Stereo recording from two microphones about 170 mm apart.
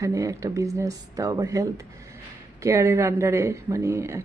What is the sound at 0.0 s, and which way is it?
Speech, 20° right (ahead or behind).